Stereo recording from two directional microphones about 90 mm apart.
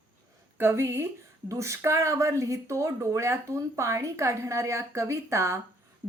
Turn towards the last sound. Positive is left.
turn(degrees=-30)  # may be behind; listen again after turning